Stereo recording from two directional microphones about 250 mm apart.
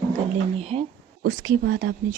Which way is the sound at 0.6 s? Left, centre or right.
Right.